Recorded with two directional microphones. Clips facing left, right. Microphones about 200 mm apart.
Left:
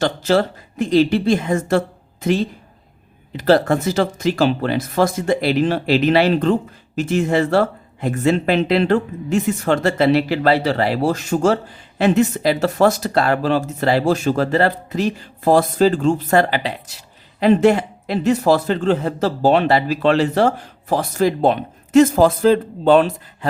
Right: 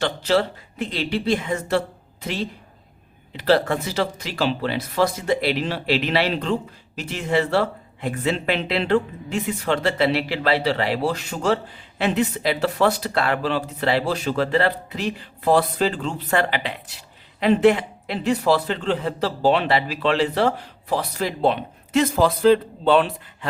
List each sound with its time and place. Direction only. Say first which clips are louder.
0.0 s speech: left 4 dB; 45° left (ahead or behind)
3.3 s speech: left 4 dB; 45° left (ahead or behind)